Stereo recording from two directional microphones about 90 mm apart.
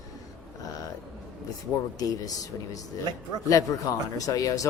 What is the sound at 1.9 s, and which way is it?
Speech, 40° left (ahead or behind).